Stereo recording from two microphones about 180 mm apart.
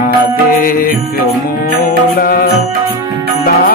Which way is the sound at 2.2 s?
55° left (ahead or behind).